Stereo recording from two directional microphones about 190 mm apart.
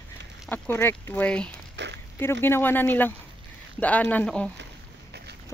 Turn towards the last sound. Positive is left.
turn(degrees=5)  # may be behind; listen again after turning